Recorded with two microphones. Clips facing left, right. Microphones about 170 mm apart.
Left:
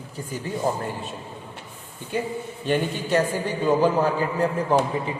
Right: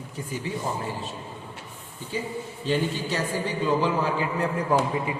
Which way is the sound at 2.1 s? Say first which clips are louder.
Left 4 dB; 60° left (ahead or behind).